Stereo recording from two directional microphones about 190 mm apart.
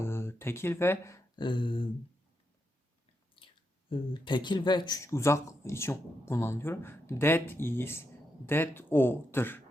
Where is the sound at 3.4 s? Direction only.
25° left (ahead or behind).